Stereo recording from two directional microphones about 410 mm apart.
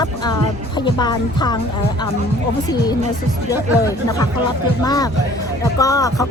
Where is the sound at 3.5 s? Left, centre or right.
Centre.